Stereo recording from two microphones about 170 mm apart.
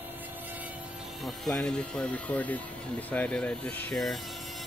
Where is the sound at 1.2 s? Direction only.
5° left (ahead or behind).